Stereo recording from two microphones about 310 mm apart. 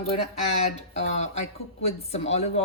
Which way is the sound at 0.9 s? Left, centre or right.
Left.